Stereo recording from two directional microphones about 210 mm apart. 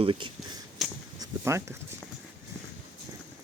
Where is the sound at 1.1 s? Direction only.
15° right (ahead or behind).